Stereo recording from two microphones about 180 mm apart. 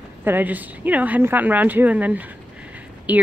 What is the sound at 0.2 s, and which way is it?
A woman's voice, 10° right (ahead or behind).